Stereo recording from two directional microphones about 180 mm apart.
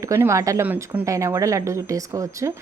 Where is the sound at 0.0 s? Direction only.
15° right (ahead or behind).